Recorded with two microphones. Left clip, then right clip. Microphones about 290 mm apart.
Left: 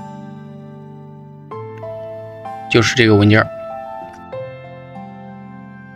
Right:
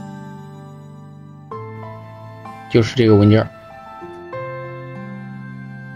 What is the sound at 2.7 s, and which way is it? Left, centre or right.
Speech, left.